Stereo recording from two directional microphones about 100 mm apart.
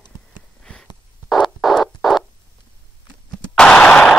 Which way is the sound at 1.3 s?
Centre (ahead or behind).